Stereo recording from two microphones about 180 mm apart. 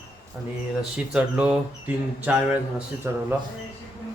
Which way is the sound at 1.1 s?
5° right (ahead or behind).